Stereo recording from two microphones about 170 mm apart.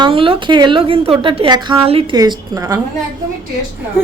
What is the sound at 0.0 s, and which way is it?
Speech, 30° right (ahead or behind).